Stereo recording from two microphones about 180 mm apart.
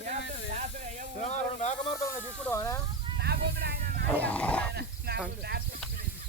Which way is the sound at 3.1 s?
65° right (ahead or behind).